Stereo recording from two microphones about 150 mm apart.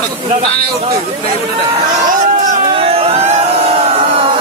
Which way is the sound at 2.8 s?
40° right (ahead or behind).